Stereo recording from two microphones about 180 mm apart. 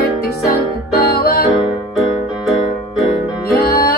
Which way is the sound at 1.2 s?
60° left (ahead or behind).